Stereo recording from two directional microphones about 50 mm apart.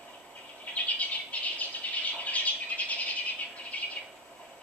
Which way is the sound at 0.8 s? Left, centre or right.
Left.